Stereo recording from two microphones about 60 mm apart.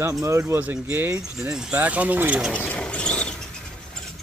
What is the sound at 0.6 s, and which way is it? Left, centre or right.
Speech, right.